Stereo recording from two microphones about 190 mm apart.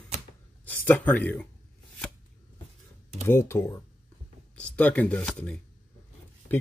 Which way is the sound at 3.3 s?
15° left (ahead or behind).